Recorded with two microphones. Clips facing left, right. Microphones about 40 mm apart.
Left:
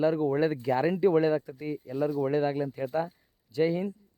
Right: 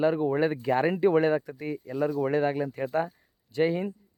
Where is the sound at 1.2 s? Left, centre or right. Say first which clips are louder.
Right 1 dB; right.